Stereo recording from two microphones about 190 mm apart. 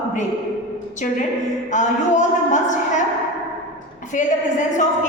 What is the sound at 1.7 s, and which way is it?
A woman's voice, 40° left (ahead or behind).